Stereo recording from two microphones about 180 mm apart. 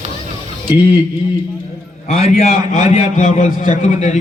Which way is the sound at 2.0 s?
40° left (ahead or behind).